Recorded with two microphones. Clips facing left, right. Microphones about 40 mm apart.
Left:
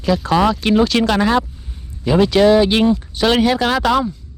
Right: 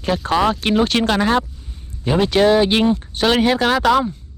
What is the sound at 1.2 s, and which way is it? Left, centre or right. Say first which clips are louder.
Speech: left 1 dB; left.